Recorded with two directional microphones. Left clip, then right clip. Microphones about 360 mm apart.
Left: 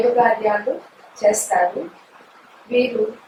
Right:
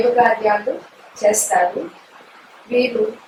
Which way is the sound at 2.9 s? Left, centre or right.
Centre.